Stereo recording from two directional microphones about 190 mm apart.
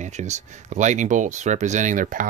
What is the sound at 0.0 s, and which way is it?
Speech, 40° right (ahead or behind).